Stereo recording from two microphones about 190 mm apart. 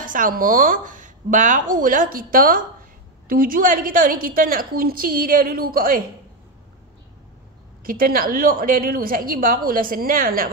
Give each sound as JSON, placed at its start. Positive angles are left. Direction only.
{"t": 0.0, "sound": "a woman's voice", "side_deg": -45}
{"t": 7.8, "sound": "a woman's voice", "side_deg": -50}